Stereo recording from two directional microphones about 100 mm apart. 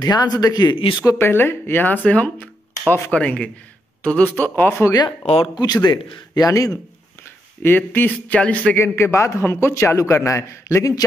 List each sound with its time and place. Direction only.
0.0 s speech: 40° left (ahead or behind)
0.7 s speech: 60° left (ahead or behind)
1.0 s a man's voice: 25° left (ahead or behind)
5.2 s speech: 90° left
5.5 s a man's voice: 40° left (ahead or behind)
7.6 s speech: 20° left (ahead or behind)
8.7 s a man's voice: 25° left (ahead or behind)